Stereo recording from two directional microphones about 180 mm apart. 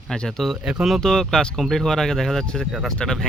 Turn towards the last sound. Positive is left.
turn(degrees=5)  # may be behind; listen again after turning